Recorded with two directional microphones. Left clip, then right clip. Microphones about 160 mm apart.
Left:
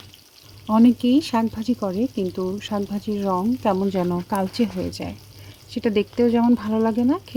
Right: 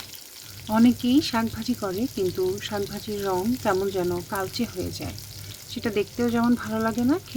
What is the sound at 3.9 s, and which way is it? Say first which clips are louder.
Speech: left 3 dB; 30° left (ahead or behind).